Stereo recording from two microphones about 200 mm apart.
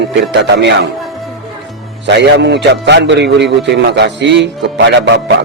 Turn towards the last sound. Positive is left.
turn(degrees=-60)  # may be behind; listen again after turning